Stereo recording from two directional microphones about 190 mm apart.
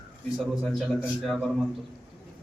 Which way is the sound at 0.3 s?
Centre (ahead or behind).